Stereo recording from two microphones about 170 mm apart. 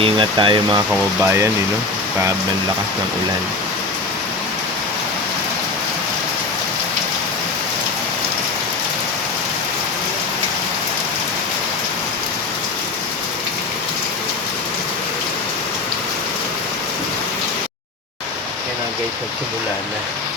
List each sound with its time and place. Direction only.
0.0 s speech: 30° right (ahead or behind)
0.9 s speech: 15° right (ahead or behind)